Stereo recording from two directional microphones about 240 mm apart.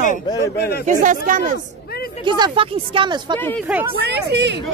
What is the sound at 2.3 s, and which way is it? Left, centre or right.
Speech, centre.